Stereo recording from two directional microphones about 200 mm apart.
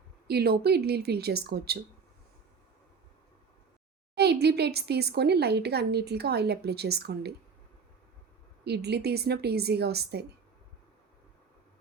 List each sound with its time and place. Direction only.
0.3 s speech: 50° right (ahead or behind)
4.1 s speech: 55° right (ahead or behind)
8.6 s speech: 55° right (ahead or behind)